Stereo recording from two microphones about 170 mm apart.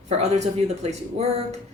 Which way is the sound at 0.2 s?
40° right (ahead or behind).